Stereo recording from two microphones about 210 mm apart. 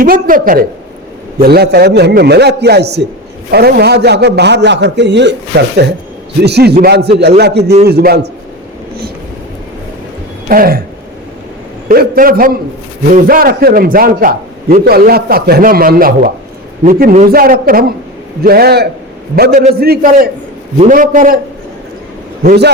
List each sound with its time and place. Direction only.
0.0 s a man's voice: 40° right (ahead or behind)
10.5 s a man's voice: 45° right (ahead or behind)
11.9 s a man's voice: 45° right (ahead or behind)
20.7 s speech: 40° right (ahead or behind)
22.4 s a man's voice: 50° right (ahead or behind)